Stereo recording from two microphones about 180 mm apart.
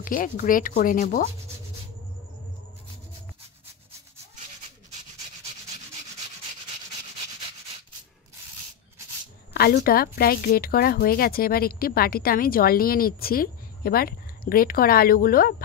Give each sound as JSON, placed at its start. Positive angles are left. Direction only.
{"t": 0.0, "sound": "speech", "side_deg": 50}
{"t": 9.5, "sound": "a woman's voice", "side_deg": 60}